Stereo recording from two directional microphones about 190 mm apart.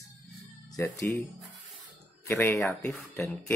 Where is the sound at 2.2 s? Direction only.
10° left (ahead or behind).